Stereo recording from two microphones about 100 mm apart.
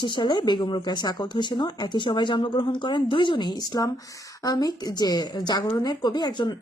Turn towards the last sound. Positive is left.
turn(degrees=45)  # may be behind; listen again after turning